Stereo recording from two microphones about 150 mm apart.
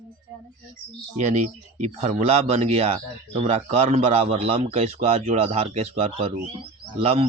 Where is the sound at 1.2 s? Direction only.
55° right (ahead or behind).